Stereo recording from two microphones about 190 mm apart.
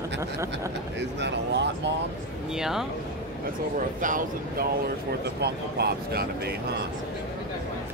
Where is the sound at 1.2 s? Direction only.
65° right (ahead or behind).